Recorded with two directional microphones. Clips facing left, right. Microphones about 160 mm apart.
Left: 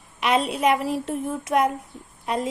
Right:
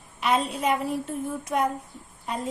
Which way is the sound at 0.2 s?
90° left.